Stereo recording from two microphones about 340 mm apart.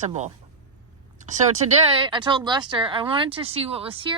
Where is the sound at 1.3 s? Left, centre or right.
Right.